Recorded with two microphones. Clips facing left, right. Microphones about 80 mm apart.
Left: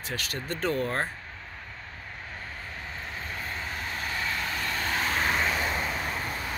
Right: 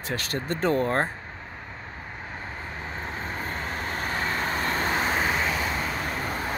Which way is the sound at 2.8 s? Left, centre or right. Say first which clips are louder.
Right 5 dB; right.